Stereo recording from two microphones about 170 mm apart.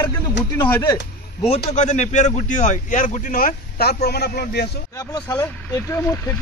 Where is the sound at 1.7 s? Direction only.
45° left (ahead or behind); by 4.6 s 70° left (ahead or behind).